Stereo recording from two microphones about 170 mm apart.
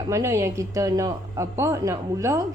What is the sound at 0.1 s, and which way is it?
A woman's voice, 15° right (ahead or behind).